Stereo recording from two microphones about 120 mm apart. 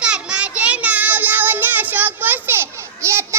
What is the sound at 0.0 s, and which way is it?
Child singing, 10° right (ahead or behind).